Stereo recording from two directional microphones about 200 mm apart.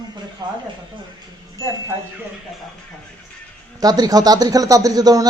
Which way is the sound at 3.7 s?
20° right (ahead or behind).